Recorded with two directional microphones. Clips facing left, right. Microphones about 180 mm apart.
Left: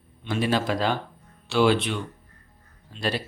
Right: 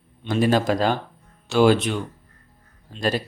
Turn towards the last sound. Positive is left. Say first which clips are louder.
# right 4 dB
turn(degrees=-45)  # may be behind; listen again after turning